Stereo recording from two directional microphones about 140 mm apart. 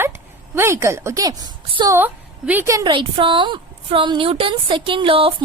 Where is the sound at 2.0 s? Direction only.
10° right (ahead or behind).